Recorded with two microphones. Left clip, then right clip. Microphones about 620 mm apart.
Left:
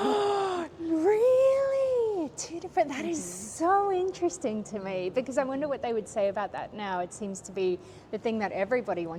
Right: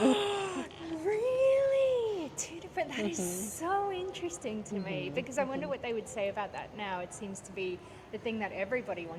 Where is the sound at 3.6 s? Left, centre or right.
Left.